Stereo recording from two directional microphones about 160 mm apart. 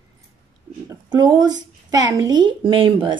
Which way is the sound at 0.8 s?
25° right (ahead or behind).